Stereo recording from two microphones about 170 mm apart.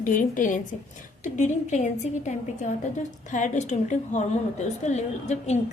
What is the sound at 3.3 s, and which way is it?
A woman's voice, 45° left (ahead or behind).